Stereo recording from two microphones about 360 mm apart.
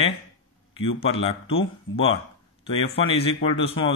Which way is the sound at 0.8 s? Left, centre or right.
Centre.